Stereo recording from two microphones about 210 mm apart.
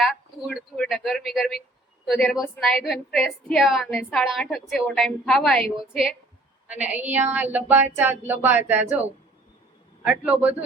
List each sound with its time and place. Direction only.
0.0 s a woman's voice: centre (ahead or behind)
6.7 s speech: 5° right (ahead or behind)
10.0 s a woman's voice: 5° right (ahead or behind)